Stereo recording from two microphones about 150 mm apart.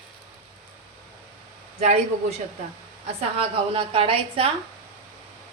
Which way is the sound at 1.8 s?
45° right (ahead or behind).